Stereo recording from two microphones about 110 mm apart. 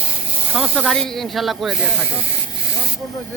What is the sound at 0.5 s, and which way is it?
Speech, 10° right (ahead or behind).